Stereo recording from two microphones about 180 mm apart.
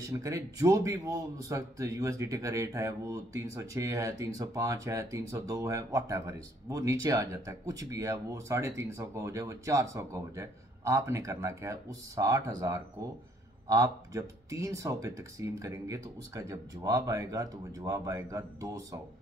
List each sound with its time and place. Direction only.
0.1 s speech: 15° right (ahead or behind)